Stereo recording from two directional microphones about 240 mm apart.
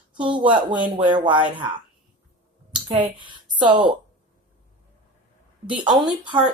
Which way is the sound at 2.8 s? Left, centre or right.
Centre.